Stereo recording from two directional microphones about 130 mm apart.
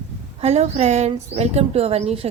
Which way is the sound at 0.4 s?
55° right (ahead or behind).